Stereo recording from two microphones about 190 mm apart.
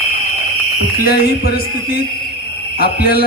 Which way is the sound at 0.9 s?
55° left (ahead or behind).